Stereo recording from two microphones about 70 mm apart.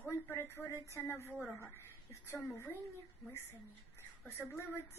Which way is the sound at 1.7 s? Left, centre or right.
Left.